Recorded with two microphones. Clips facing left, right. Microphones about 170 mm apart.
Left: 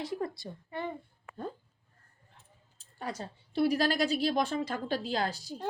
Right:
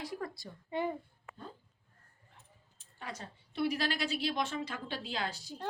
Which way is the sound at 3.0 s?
35° left (ahead or behind).